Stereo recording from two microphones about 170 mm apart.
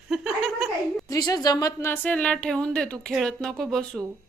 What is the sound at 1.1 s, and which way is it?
Speech, 20° left (ahead or behind).